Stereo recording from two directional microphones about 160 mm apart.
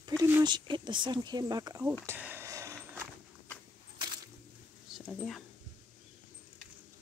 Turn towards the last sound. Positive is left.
turn(degrees=0)  # may be behind; listen again after turning